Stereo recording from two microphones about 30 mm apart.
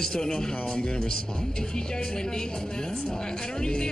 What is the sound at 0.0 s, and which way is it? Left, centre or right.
Speech, left.